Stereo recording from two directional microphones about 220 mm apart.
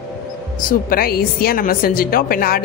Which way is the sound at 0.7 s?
40° left (ahead or behind).